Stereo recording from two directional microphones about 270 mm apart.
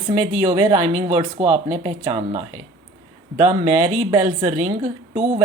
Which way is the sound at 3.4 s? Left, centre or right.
Centre.